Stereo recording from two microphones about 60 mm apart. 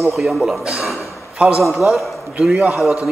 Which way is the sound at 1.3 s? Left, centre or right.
Centre.